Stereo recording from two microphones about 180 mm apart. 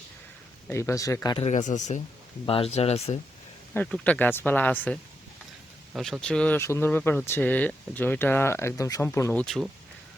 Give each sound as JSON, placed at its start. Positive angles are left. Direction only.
{"t": 0.7, "sound": "speech", "side_deg": 15}
{"t": 1.4, "sound": "speech", "side_deg": 40}
{"t": 3.8, "sound": "speech", "side_deg": 5}
{"t": 9.4, "sound": "speech", "side_deg": 0}